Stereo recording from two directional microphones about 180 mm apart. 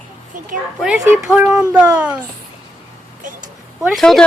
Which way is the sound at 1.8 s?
15° right (ahead or behind).